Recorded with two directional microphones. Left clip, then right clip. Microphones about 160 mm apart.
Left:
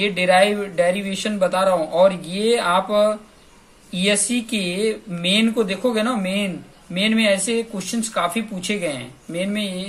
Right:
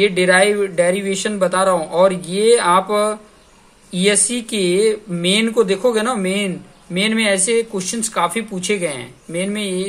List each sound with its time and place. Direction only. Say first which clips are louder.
0.0 s speech: right 3 dB; 50° right (ahead or behind)